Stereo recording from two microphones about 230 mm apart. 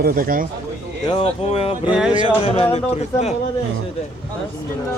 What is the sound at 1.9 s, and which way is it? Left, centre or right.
Music, centre.